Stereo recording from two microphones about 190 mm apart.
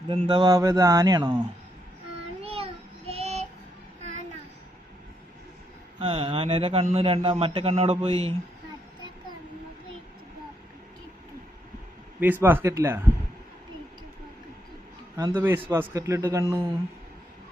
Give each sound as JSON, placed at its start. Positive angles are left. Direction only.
{"t": 0.1, "sound": "a man's voice", "side_deg": -30}
{"t": 2.4, "sound": "child singing", "side_deg": -30}
{"t": 6.0, "sound": "a man's voice", "side_deg": -30}
{"t": 12.2, "sound": "speech", "side_deg": -10}
{"t": 15.1, "sound": "speech", "side_deg": -15}